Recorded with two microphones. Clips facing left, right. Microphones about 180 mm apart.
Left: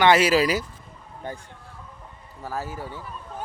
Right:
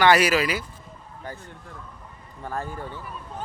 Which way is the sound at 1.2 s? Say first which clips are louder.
Left 3 dB; 25° left (ahead or behind).